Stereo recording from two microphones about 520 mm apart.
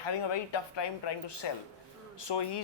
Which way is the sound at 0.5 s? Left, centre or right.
Left.